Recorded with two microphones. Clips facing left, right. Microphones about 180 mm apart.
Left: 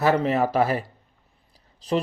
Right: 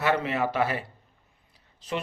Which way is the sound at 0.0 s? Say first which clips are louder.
Left 5 dB; 40° left (ahead or behind).